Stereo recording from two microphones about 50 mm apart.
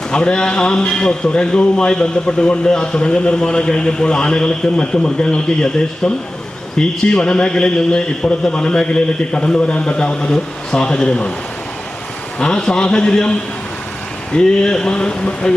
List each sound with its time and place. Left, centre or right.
0.1 s a man's voice: centre
12.4 s a man's voice: centre
14.3 s a man's voice: centre